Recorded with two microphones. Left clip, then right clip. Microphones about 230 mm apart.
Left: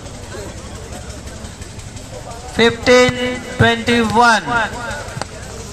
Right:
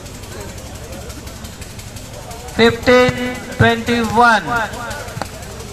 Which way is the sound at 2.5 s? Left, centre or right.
Left.